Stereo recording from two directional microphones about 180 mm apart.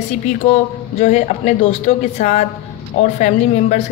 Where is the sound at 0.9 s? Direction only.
45° left (ahead or behind).